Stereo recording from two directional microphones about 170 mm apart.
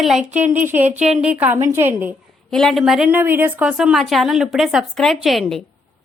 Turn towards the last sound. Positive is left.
turn(degrees=0)  # may be behind; listen again after turning